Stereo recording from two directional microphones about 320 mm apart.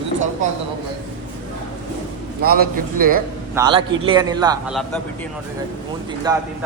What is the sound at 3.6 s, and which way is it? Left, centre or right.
A man's voice, centre.